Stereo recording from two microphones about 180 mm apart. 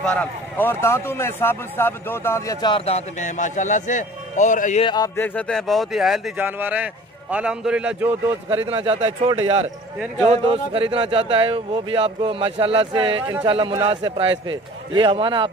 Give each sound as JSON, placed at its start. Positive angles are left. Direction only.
{"t": 0.0, "sound": "speech", "side_deg": 5}
{"t": 4.8, "sound": "speech", "side_deg": 25}
{"t": 5.1, "sound": "speech", "side_deg": 10}
{"t": 8.6, "sound": "a man's voice", "side_deg": -30}
{"t": 13.3, "sound": "a man's voice", "side_deg": -20}